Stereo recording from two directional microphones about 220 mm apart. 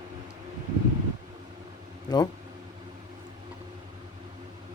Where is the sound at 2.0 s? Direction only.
20° left (ahead or behind).